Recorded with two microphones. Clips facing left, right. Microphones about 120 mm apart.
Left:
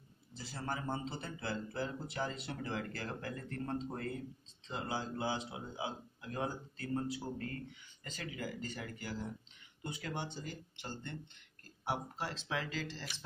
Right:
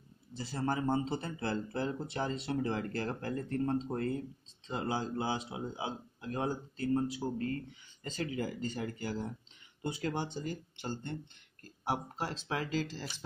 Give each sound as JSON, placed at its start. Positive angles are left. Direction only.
{"t": 0.5, "sound": "speech", "side_deg": -35}